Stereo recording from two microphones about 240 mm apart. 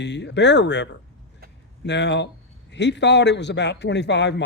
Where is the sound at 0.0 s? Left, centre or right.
Left.